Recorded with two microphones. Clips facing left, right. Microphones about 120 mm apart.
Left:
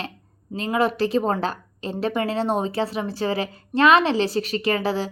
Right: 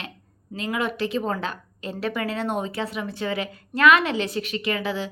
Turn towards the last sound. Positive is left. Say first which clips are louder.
# left 4 dB
turn(degrees=35)  # may be behind; listen again after turning